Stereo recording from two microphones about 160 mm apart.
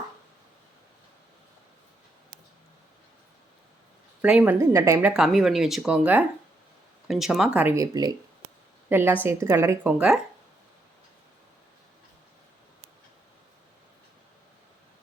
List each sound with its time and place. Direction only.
4.2 s a woman's voice: 10° right (ahead or behind)
5.1 s speech: 5° right (ahead or behind)
7.8 s speech: 25° right (ahead or behind)
8.9 s a woman's voice: 15° right (ahead or behind)